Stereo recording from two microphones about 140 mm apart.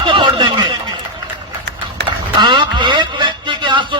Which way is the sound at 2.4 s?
35° right (ahead or behind).